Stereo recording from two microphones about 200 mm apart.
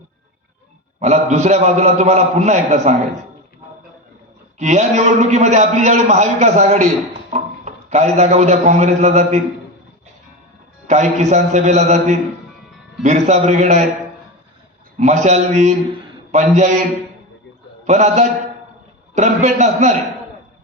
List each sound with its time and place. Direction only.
0.9 s a man's voice: 35° right (ahead or behind)
4.6 s a man's voice: 35° right (ahead or behind)
10.8 s a man's voice: 35° right (ahead or behind)
14.9 s a man's voice: 35° right (ahead or behind)
17.8 s a man's voice: 35° right (ahead or behind)